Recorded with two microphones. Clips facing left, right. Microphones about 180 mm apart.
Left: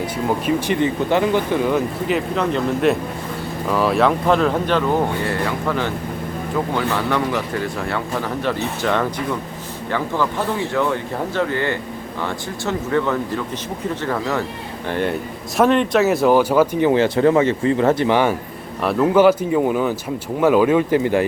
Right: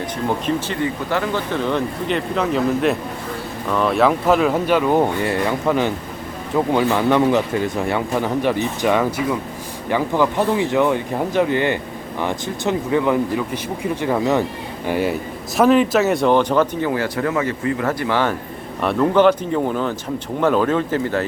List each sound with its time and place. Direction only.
0.0 s speech: 10° left (ahead or behind); by 14.4 s 15° right (ahead or behind)
14.8 s speech: 5° right (ahead or behind)
16.8 s speech: 25° left (ahead or behind)
18.8 s speech: 5° left (ahead or behind)